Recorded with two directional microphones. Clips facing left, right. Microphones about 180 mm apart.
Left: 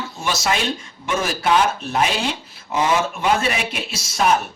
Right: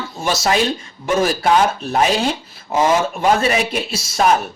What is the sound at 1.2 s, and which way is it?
Speech, 40° right (ahead or behind).